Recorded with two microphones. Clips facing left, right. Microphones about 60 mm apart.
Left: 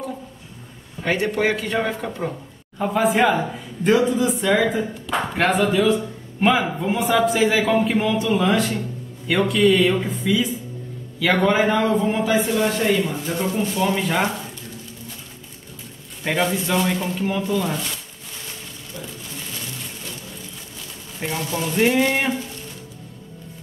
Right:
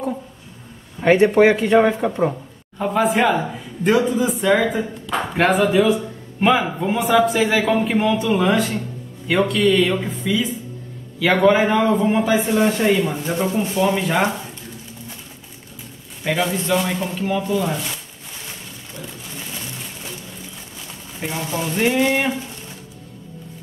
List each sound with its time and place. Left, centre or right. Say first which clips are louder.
1.0 s speech: right 8 dB; right
2.8 s a man's voice: right 1 dB; centre
13.9 s speech: right 2 dB; centre
16.3 s speech: right 1 dB; centre
21.2 s speech: right 1 dB; centre